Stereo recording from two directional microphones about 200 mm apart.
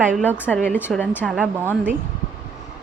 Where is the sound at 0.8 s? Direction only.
10° left (ahead or behind).